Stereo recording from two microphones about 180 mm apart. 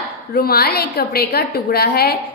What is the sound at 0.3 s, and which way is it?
A woman's voice, 55° left (ahead or behind).